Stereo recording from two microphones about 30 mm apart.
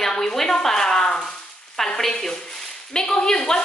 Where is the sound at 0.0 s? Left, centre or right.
Left.